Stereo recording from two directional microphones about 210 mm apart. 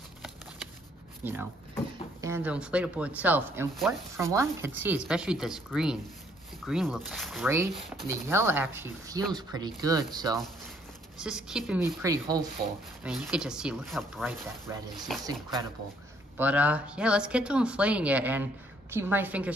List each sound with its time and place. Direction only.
1.2 s speech: 10° right (ahead or behind)
7.4 s speech: 10° right (ahead or behind)
11.1 s speech: 5° right (ahead or behind)
13.0 s speech: 5° right (ahead or behind)
16.3 s speech: 5° right (ahead or behind)